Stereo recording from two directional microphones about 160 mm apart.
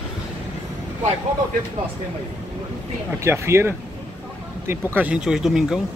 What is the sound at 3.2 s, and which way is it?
Speech, 15° right (ahead or behind).